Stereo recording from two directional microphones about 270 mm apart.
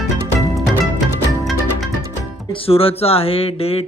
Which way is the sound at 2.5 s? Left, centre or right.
Left.